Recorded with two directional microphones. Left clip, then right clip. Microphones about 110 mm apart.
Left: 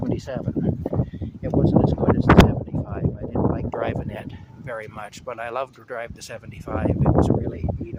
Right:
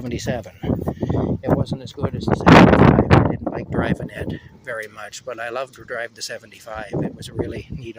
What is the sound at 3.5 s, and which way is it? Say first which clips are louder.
Speech: right 2 dB; 25° left (ahead or behind).